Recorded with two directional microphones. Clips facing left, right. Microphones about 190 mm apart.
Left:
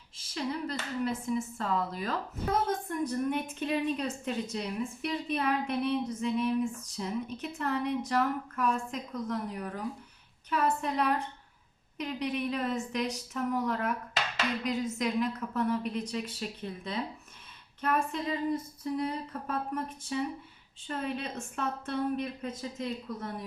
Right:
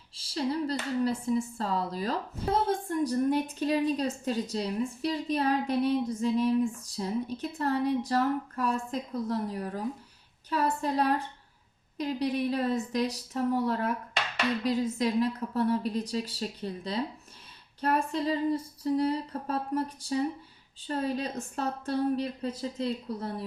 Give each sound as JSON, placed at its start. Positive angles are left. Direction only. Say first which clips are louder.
{"t": 0.2, "sound": "speech", "louder": "right 4 dB", "side_deg": -35}